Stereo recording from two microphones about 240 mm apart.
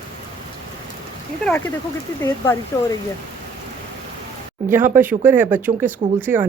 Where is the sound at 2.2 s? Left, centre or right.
Centre.